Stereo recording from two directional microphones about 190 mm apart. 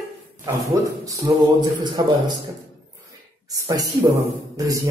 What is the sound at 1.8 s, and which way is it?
Speech, 20° right (ahead or behind).